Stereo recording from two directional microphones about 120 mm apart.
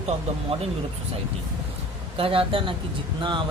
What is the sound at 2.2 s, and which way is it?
Speech, 50° right (ahead or behind).